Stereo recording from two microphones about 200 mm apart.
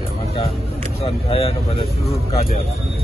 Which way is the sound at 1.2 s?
30° left (ahead or behind).